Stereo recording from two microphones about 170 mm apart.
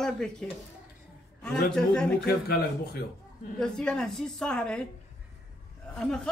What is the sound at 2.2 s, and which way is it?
Speech, 65° left (ahead or behind).